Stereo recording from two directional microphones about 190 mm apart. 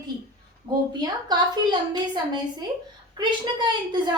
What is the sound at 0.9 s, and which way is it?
A woman's voice, 20° right (ahead or behind).